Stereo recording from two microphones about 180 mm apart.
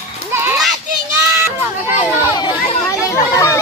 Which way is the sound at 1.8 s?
10° right (ahead or behind).